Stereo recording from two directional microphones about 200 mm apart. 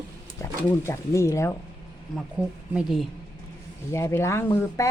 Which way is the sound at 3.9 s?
15° left (ahead or behind).